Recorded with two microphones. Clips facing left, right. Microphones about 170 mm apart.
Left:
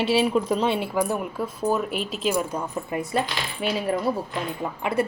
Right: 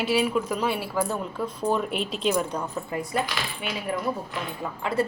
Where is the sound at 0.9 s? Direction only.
15° left (ahead or behind).